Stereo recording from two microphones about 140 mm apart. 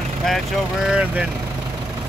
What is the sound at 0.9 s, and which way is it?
Speech, 10° right (ahead or behind).